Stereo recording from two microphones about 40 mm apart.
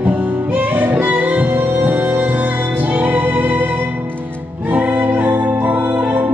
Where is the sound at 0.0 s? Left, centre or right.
Right.